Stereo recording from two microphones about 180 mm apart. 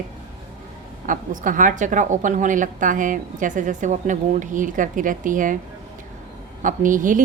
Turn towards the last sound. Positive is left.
turn(degrees=-45)  # may be behind; listen again after turning